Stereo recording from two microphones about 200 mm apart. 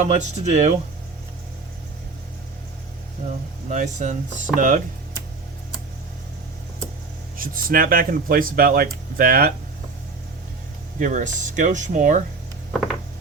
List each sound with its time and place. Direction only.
0.0 s speech: 35° right (ahead or behind)
3.7 s speech: 35° right (ahead or behind)
7.3 s speech: 45° right (ahead or behind)
11.0 s speech: 40° right (ahead or behind)